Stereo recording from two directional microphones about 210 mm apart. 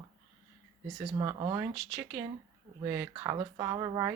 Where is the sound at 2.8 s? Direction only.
15° right (ahead or behind).